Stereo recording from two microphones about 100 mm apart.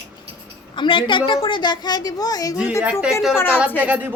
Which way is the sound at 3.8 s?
15° right (ahead or behind).